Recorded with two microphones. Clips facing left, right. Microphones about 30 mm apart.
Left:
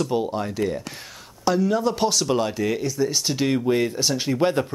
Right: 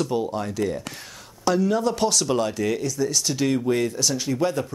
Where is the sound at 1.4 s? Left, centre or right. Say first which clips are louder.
Even; centre.